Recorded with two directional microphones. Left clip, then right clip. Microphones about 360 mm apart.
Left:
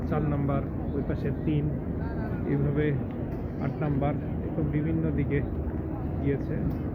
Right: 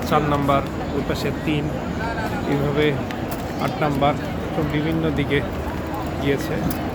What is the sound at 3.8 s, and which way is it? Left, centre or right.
Speech, centre.